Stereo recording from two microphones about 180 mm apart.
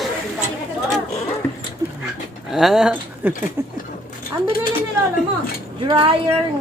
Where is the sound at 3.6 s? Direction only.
15° right (ahead or behind).